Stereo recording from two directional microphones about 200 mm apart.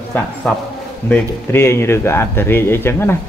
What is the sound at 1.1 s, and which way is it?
A man's voice, 10° left (ahead or behind).